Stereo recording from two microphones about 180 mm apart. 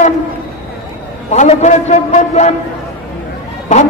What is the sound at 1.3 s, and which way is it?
A man's voice, 40° left (ahead or behind).